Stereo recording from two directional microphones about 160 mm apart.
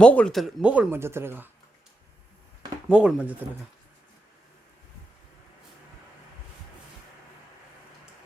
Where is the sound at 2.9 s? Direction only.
5° right (ahead or behind).